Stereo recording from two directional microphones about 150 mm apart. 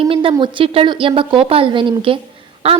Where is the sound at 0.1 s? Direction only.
35° right (ahead or behind).